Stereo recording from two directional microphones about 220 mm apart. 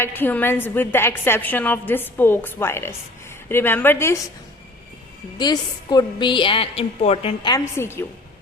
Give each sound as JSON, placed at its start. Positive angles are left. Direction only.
{"t": 0.0, "sound": "a woman's voice", "side_deg": 10}
{"t": 5.4, "sound": "a woman's voice", "side_deg": 20}